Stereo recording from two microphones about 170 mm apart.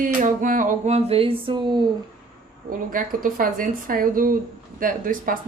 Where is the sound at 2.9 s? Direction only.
55° right (ahead or behind).